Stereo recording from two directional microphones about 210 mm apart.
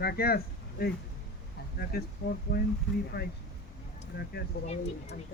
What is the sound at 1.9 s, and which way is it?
Speech, 45° left (ahead or behind).